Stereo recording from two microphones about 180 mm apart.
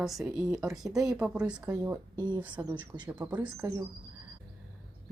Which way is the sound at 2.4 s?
10° right (ahead or behind).